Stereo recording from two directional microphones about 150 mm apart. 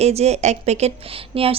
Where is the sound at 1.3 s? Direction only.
40° right (ahead or behind).